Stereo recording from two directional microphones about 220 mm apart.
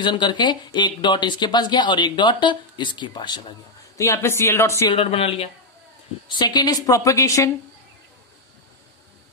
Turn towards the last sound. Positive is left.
turn(degrees=15)  # may be behind; listen again after turning